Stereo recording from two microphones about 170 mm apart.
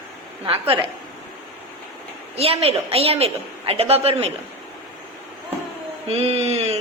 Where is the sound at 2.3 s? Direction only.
35° right (ahead or behind).